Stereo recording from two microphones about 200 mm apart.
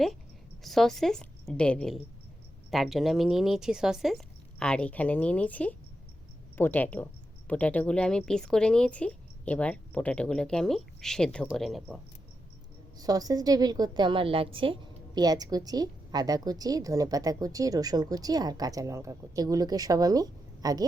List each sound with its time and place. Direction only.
0.6 s speech: centre (ahead or behind)
13.0 s a woman's voice: 20° right (ahead or behind)